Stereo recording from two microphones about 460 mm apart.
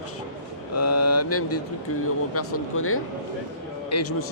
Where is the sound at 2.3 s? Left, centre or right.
Left.